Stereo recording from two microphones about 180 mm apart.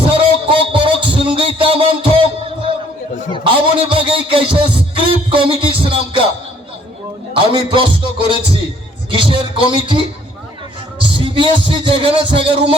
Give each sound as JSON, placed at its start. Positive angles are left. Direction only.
{"t": 0.0, "sound": "music", "side_deg": -30}
{"t": 3.4, "sound": "music", "side_deg": -30}
{"t": 7.3, "sound": "music", "side_deg": -30}
{"t": 9.0, "sound": "music", "side_deg": -25}
{"t": 11.0, "sound": "speech", "side_deg": -25}